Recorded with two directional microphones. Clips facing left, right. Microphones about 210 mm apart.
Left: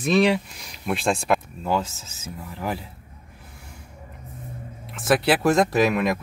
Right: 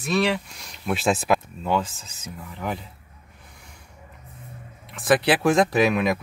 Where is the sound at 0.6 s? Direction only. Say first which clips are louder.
Even; centre (ahead or behind).